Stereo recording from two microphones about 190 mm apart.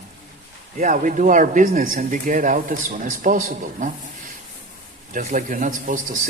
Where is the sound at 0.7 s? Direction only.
40° right (ahead or behind).